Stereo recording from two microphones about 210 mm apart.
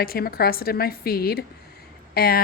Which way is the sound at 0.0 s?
45° left (ahead or behind).